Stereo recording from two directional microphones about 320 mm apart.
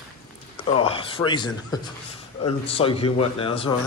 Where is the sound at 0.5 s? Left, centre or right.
Centre.